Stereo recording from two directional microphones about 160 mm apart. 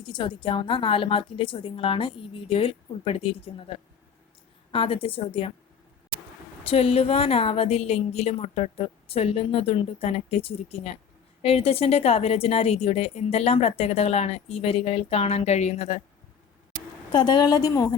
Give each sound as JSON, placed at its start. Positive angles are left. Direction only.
{"t": 0.0, "sound": "a woman's voice", "side_deg": 30}
{"t": 4.7, "sound": "a woman's voice", "side_deg": 35}
{"t": 6.7, "sound": "a woman's voice", "side_deg": 40}
{"t": 17.1, "sound": "a woman's voice", "side_deg": 30}